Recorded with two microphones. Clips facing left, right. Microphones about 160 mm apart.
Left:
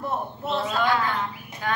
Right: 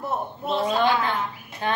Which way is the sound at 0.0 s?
10° right (ahead or behind).